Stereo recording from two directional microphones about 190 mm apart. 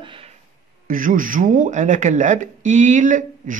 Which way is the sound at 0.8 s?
45° right (ahead or behind).